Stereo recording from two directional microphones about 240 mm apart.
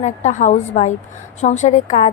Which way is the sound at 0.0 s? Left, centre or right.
Left.